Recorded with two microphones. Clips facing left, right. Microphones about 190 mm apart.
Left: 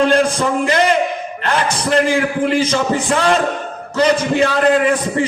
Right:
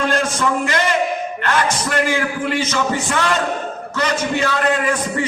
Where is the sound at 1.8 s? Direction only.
30° left (ahead or behind).